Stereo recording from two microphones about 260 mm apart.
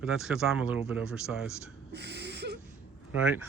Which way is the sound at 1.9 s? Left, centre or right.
Right.